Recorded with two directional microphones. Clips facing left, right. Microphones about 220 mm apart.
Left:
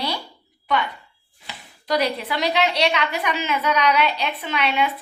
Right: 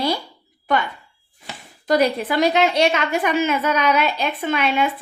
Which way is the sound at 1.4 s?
45° right (ahead or behind).